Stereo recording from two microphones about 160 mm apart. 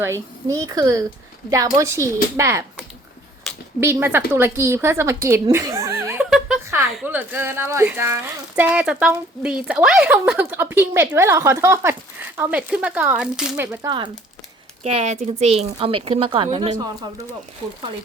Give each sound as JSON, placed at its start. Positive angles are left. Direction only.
{"t": 0.0, "sound": "speech", "side_deg": -20}
{"t": 3.8, "sound": "speech", "side_deg": -15}
{"t": 13.8, "sound": "speech", "side_deg": -30}
{"t": 14.8, "sound": "a woman's voice", "side_deg": -40}